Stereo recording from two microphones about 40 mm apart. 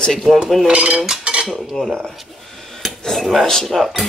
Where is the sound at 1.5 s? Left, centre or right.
Centre.